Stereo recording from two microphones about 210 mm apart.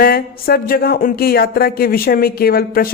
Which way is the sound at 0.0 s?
45° left (ahead or behind).